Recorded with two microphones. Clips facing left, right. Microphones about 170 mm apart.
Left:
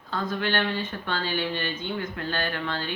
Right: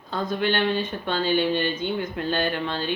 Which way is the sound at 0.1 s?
20° right (ahead or behind).